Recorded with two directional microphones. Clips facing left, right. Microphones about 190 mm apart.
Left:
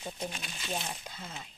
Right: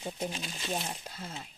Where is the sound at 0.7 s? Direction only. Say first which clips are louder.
Right 1 dB; 10° right (ahead or behind).